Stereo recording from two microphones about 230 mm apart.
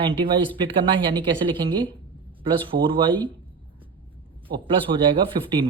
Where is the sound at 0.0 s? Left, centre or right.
Right.